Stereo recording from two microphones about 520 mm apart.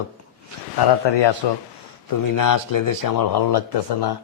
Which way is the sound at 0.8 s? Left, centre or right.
Left.